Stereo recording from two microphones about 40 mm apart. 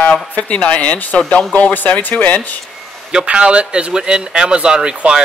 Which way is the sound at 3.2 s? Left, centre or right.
Right.